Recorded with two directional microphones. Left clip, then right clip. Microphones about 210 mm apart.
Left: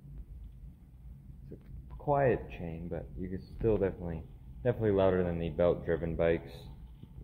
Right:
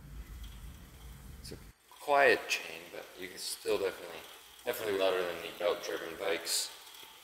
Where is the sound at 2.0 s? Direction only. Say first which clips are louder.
Right 3 dB; 25° right (ahead or behind).